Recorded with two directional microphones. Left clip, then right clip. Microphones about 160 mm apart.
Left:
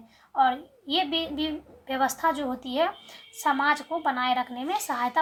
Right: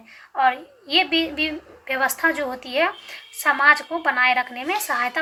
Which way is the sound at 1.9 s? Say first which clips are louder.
Right 4 dB; 30° left (ahead or behind).